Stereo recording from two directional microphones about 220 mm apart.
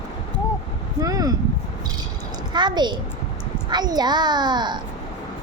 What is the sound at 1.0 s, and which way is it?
Speech, 15° right (ahead or behind).